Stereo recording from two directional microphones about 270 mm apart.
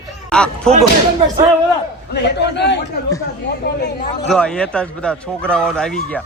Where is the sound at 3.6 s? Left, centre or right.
Left.